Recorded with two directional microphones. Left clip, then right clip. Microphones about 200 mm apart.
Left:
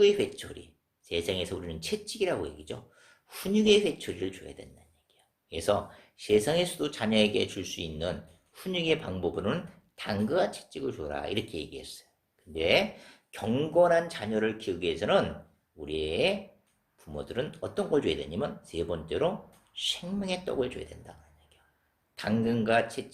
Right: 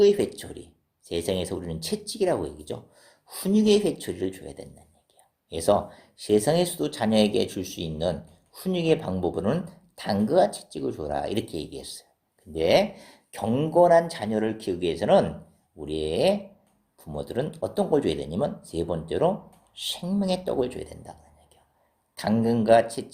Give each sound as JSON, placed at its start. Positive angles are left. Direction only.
{"t": 0.3, "sound": "a sound", "side_deg": -45}
{"t": 1.3, "sound": "speech", "side_deg": -45}
{"t": 22.2, "sound": "speech", "side_deg": -45}